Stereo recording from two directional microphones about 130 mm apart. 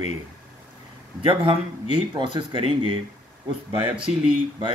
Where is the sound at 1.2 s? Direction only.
45° right (ahead or behind).